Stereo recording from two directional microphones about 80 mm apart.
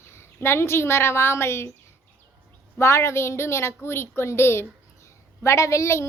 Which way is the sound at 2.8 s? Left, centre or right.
Left.